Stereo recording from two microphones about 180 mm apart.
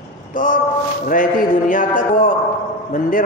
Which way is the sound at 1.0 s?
45° left (ahead or behind).